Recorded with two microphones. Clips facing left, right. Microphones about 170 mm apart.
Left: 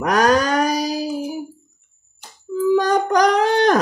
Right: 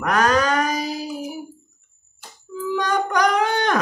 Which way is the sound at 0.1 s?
40° left (ahead or behind).